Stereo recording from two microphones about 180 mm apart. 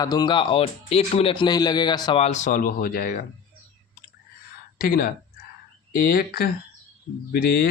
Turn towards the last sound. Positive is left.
turn(degrees=60)  # may be behind; listen again after turning